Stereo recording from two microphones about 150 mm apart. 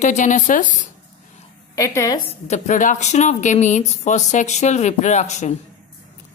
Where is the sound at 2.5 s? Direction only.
55° left (ahead or behind).